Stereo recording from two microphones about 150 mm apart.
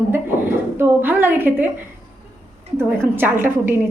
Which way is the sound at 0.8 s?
15° right (ahead or behind).